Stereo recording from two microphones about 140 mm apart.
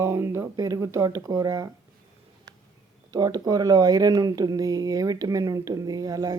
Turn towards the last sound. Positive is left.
turn(degrees=-25)  # may be behind; listen again after turning